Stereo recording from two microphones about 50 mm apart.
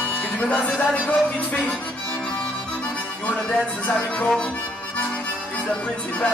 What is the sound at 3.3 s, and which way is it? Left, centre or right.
Speech, left.